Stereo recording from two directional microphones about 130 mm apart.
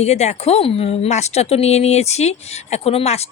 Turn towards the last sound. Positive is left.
turn(degrees=55)  # may be behind; listen again after turning